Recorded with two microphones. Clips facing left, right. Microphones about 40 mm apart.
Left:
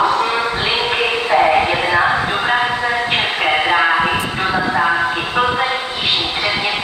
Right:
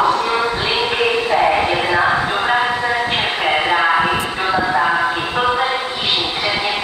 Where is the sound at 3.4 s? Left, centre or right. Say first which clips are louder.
Left 1 dB; centre.